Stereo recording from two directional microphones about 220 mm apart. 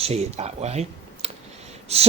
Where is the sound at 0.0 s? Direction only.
30° right (ahead or behind).